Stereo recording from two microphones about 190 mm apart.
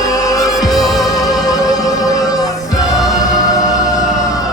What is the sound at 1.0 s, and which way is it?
Music, 20° left (ahead or behind).